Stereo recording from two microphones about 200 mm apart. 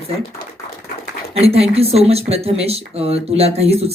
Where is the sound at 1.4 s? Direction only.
30° right (ahead or behind).